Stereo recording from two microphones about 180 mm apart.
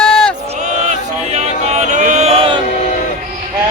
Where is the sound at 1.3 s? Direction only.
40° right (ahead or behind).